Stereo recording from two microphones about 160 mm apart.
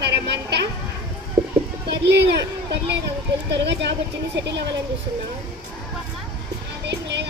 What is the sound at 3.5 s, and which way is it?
Speech, 90° right.